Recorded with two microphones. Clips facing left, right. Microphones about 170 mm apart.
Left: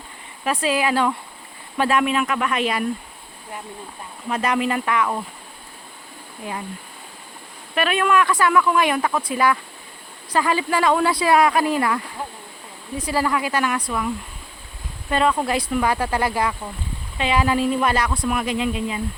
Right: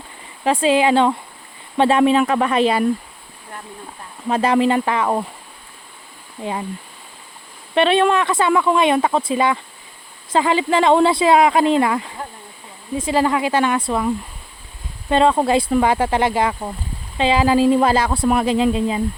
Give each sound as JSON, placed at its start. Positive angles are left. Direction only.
{"t": 0.4, "sound": "speech", "side_deg": -25}
{"t": 4.3, "sound": "speech", "side_deg": -30}
{"t": 6.4, "sound": "speech", "side_deg": -25}
{"t": 7.8, "sound": "speech", "side_deg": -30}
{"t": 15.1, "sound": "speech", "side_deg": -30}